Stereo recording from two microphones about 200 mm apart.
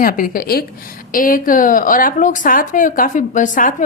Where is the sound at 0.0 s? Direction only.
45° left (ahead or behind).